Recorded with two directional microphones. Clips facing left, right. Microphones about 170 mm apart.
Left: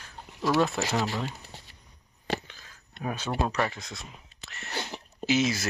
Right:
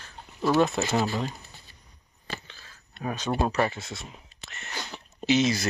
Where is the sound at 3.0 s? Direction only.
10° left (ahead or behind).